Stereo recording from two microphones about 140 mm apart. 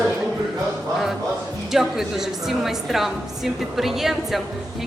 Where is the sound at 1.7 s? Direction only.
Centre (ahead or behind).